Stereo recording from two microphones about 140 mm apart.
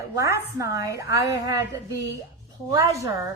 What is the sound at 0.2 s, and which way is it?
A woman's voice, 20° right (ahead or behind).